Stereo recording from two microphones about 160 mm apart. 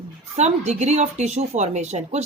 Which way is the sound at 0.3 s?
45° right (ahead or behind).